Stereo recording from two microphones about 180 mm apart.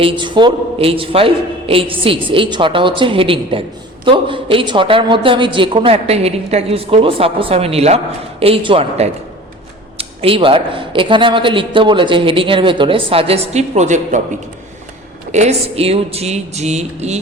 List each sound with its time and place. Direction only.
0.0 s a woman's voice: 25° right (ahead or behind); by 14.2 s 40° right (ahead or behind)
15.3 s speech: 40° right (ahead or behind)